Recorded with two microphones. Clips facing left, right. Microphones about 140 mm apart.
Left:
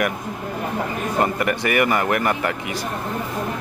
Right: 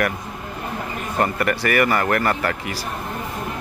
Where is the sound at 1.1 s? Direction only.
20° left (ahead or behind).